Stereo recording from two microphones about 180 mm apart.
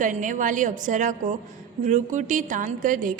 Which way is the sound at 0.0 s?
45° right (ahead or behind).